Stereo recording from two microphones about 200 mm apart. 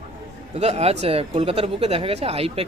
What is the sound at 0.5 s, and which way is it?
A man's voice, 30° right (ahead or behind).